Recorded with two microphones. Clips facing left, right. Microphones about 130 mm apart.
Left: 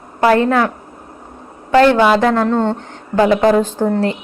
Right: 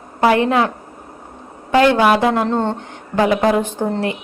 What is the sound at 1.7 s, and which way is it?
A woman's voice, 15° right (ahead or behind).